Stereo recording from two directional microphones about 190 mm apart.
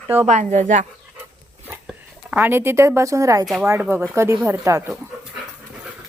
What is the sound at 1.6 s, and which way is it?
Speech, 10° right (ahead or behind).